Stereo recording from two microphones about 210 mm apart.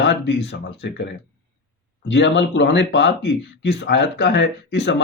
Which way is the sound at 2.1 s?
60° left (ahead or behind).